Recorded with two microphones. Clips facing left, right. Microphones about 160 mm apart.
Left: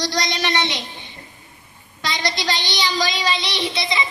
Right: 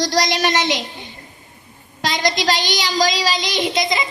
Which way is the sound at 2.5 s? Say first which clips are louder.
Right 3 dB; 45° right (ahead or behind).